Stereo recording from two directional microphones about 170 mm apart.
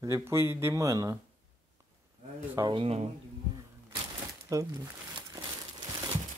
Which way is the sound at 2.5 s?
30° right (ahead or behind).